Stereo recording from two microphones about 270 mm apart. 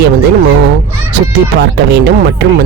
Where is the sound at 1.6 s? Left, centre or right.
Right.